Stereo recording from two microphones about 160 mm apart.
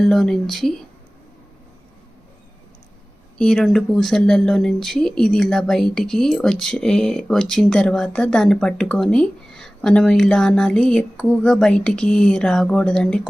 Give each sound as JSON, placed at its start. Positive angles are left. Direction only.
{"t": 0.0, "sound": "speech", "side_deg": 0}
{"t": 3.3, "sound": "speech", "side_deg": 5}